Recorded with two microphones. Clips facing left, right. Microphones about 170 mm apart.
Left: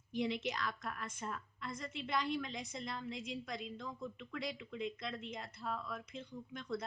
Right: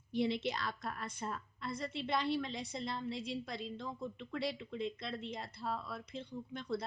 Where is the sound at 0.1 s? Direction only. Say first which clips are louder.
Right 3 dB; 30° right (ahead or behind).